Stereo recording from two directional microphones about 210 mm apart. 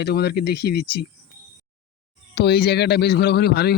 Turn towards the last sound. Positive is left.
turn(degrees=50)  # may be behind; listen again after turning